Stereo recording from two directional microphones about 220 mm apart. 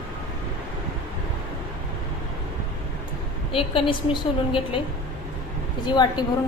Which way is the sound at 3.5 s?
25° left (ahead or behind).